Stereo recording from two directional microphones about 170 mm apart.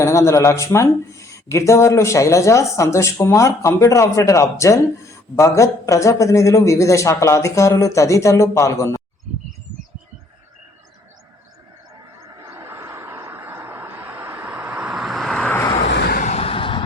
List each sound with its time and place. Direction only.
0.0 s speech: 15° left (ahead or behind)
12.5 s a sound: 15° right (ahead or behind); by 15.5 s centre (ahead or behind)
15.8 s vehicle: 85° left
16.2 s vehicle: 35° left (ahead or behind)